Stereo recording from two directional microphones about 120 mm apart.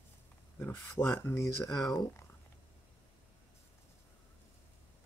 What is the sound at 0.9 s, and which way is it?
Speech, 20° left (ahead or behind).